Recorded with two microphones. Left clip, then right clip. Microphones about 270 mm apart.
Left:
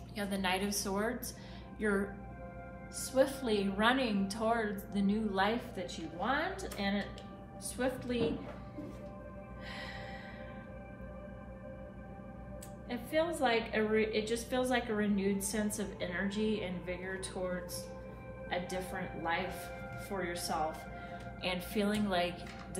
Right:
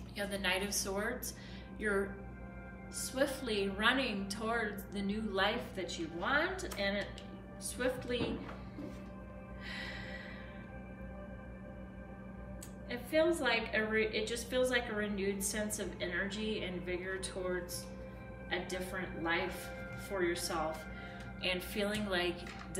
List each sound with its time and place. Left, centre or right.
0.1 s a woman's voice: left
9.7 s music: centre
12.9 s a woman's voice: centre
18.5 s a woman's voice: centre